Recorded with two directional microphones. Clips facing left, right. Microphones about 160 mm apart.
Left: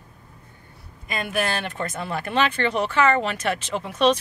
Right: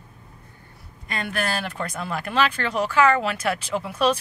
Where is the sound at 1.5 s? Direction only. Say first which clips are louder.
Even; 5° right (ahead or behind).